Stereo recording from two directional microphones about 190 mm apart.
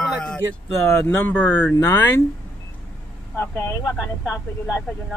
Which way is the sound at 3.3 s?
10° left (ahead or behind).